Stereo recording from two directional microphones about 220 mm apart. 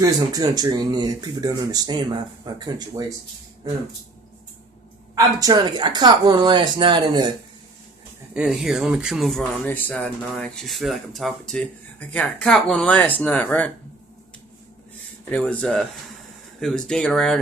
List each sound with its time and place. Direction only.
0.0 s speech: 15° right (ahead or behind)
5.4 s speech: 20° right (ahead or behind)
8.4 s speech: centre (ahead or behind)
15.2 s speech: 5° left (ahead or behind)